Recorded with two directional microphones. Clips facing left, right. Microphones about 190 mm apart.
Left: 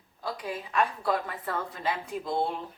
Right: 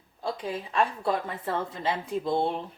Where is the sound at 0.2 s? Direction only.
25° right (ahead or behind).